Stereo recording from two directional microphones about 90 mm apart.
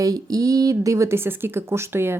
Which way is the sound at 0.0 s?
40° right (ahead or behind).